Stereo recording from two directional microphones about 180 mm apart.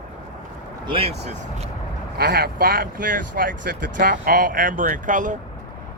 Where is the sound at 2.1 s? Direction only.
60° right (ahead or behind).